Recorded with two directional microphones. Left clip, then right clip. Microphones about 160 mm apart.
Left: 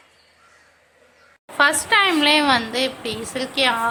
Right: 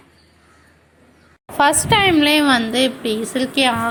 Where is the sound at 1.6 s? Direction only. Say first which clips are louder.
Right 2 dB; 20° right (ahead or behind).